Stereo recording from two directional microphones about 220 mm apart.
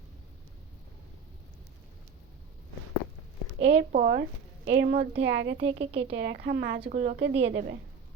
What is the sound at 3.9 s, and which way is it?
A woman's voice, 40° right (ahead or behind).